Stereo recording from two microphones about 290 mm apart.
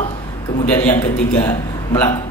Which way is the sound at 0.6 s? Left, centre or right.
Centre.